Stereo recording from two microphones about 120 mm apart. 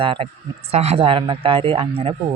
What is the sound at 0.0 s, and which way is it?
Speech, 50° right (ahead or behind).